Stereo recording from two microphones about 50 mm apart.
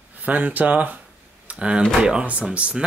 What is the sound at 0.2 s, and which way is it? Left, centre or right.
Speech, right.